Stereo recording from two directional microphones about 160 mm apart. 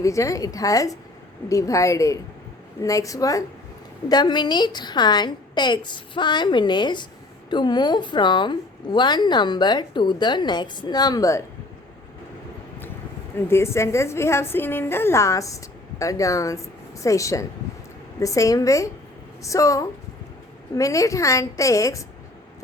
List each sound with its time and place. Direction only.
0.0 s a woman's voice: 20° left (ahead or behind)
13.5 s a woman's voice: 15° left (ahead or behind)